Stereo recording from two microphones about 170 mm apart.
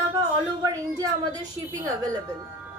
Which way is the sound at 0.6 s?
20° right (ahead or behind).